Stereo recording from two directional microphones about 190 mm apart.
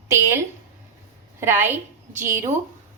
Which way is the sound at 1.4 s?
10° right (ahead or behind).